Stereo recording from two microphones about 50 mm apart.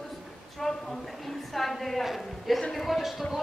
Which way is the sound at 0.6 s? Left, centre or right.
Centre.